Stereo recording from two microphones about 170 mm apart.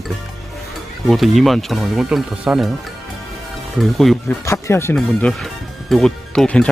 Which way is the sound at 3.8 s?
Centre (ahead or behind).